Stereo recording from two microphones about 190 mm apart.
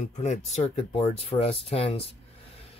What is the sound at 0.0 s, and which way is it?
Speech, 35° left (ahead or behind).